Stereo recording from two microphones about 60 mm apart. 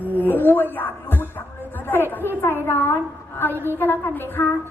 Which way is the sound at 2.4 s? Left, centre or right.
Left.